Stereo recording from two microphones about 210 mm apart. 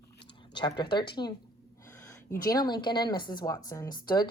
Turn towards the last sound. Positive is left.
turn(degrees=20)  # may be behind; listen again after turning